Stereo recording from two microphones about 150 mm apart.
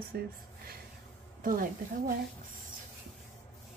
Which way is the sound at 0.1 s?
90° right.